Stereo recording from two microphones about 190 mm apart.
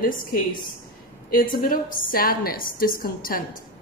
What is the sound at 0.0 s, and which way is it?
A woman's voice, 50° left (ahead or behind).